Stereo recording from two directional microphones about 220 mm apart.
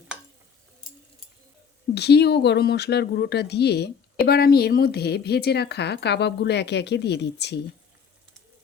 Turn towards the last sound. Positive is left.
turn(degrees=50)  # may be behind; listen again after turning